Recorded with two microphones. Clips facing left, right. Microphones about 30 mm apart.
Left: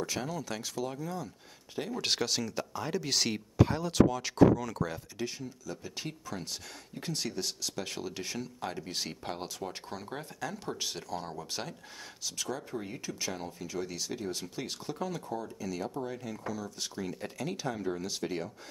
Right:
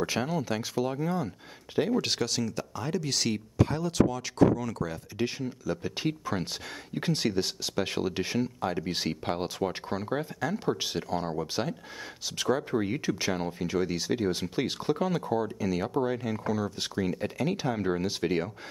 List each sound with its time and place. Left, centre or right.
0.0 s speech: right
0.9 s speech: right
2.0 s speech: centre
5.2 s speech: right
12.4 s speech: right
17.2 s speech: right